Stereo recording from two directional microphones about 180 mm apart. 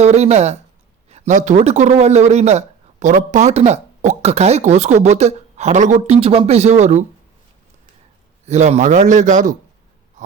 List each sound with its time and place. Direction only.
0.0 s speech: 40° right (ahead or behind)
8.4 s a man's voice: 40° right (ahead or behind)